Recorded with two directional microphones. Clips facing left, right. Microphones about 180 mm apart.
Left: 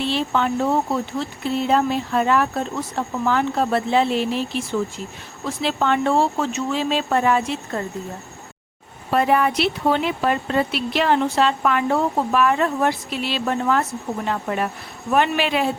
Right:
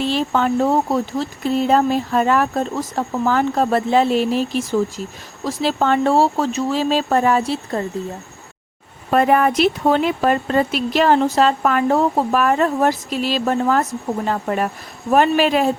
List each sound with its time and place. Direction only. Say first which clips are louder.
0.0 s speech: right 3 dB; 45° right (ahead or behind)
9.0 s speech: right 3 dB; 50° right (ahead or behind)